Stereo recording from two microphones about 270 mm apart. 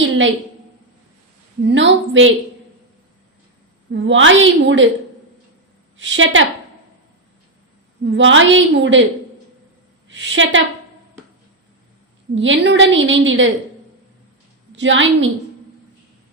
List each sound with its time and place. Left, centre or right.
1.6 s a woman's voice: right
3.9 s a woman's voice: right
6.0 s a woman's voice: right
8.0 s a woman's voice: right
10.1 s a woman's voice: right
12.3 s a woman's voice: right
14.8 s a woman's voice: right